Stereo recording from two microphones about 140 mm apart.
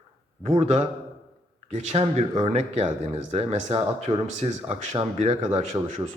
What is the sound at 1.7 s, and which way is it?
A man's voice, 50° right (ahead or behind).